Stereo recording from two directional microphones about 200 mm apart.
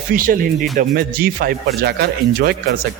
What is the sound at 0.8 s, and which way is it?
A man's voice, 45° right (ahead or behind).